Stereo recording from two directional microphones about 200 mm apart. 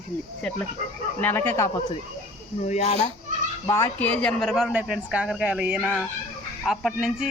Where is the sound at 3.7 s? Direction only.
15° left (ahead or behind).